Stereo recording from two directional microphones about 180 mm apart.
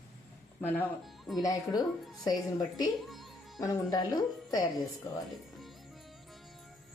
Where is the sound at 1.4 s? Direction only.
20° left (ahead or behind).